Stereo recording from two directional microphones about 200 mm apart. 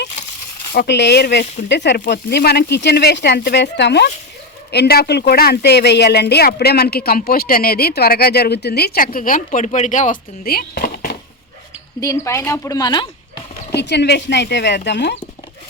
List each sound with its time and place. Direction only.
0.7 s speech: 55° left (ahead or behind)
11.9 s speech: 15° left (ahead or behind)
13.7 s speech: 55° left (ahead or behind)